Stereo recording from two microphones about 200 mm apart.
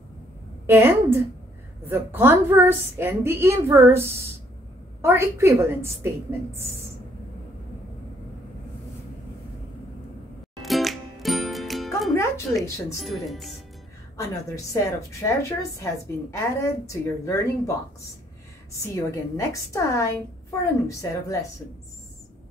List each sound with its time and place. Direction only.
0.7 s a woman's voice: 10° right (ahead or behind)
10.6 s music: centre (ahead or behind)
13.0 s speech: centre (ahead or behind)
14.1 s a woman's voice: 15° left (ahead or behind)